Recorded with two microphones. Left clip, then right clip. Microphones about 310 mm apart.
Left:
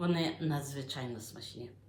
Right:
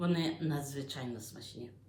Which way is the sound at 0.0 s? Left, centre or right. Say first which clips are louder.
Left 1 dB; centre.